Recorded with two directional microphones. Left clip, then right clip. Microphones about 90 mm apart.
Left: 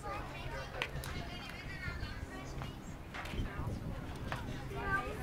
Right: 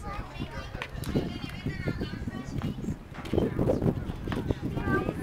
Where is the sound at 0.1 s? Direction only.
20° right (ahead or behind).